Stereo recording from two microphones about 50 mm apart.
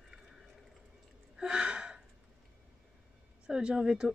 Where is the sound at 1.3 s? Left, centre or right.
Right.